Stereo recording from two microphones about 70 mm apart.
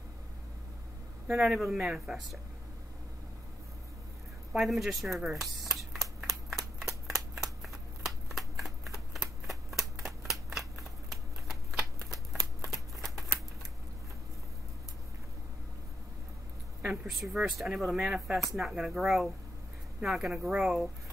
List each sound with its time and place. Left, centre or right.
1.3 s speech: centre
4.5 s speech: centre
5.2 s shuffling cards: centre
10.8 s scissors: centre
12.1 s shuffling cards: centre
16.8 s a sound: centre
17.2 s speech: centre